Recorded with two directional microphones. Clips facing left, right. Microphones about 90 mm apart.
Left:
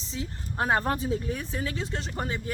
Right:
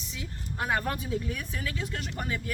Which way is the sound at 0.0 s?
30° left (ahead or behind).